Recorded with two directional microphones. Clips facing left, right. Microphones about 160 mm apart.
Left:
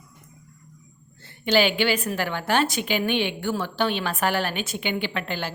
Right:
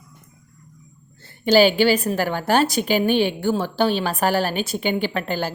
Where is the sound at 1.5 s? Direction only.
40° right (ahead or behind).